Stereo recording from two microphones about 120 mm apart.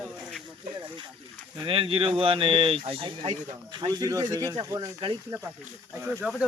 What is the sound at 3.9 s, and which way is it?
Speech, 30° right (ahead or behind).